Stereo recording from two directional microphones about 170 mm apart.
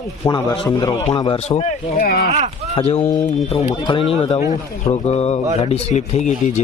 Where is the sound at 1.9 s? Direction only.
65° left (ahead or behind).